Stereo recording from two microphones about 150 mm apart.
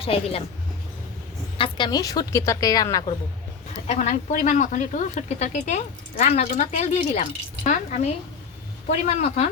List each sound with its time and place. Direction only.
0.0 s speech: 40° left (ahead or behind)
1.5 s a woman's voice: 35° left (ahead or behind)
3.8 s speech: 50° left (ahead or behind)